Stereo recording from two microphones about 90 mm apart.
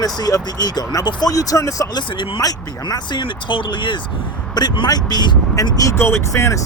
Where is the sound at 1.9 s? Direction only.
65° left (ahead or behind).